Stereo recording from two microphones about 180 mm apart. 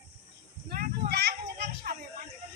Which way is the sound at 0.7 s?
60° right (ahead or behind).